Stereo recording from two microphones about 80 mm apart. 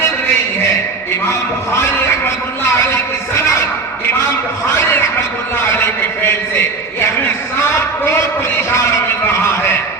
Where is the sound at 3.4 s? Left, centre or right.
Left.